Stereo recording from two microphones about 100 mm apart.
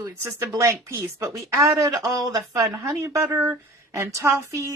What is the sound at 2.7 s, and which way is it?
A woman's voice, 30° right (ahead or behind).